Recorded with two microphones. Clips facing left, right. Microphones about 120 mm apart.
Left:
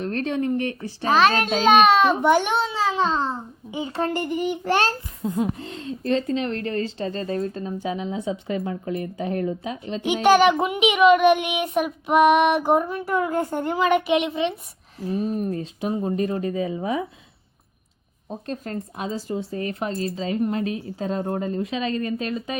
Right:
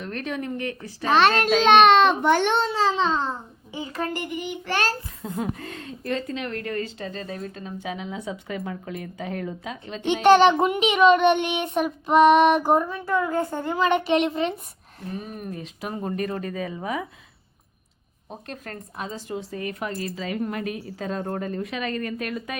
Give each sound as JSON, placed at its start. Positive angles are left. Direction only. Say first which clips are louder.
{"t": 0.0, "sound": "speech", "louder": "left 6 dB", "side_deg": 35}
{"t": 1.1, "sound": "a child's voice", "louder": "even", "side_deg": 0}
{"t": 3.7, "sound": "a child's voice", "louder": "left 4 dB", "side_deg": 25}
{"t": 4.9, "sound": "speech", "louder": "left 3 dB", "side_deg": 25}
{"t": 10.0, "sound": "a child's voice", "louder": "right 1 dB", "side_deg": 10}
{"t": 13.4, "sound": "a woman's voice", "louder": "left 1 dB", "side_deg": 15}
{"t": 15.1, "sound": "a child's voice", "louder": "left 9 dB", "side_deg": 30}
{"t": 18.4, "sound": "speech", "louder": "left 8 dB", "side_deg": 30}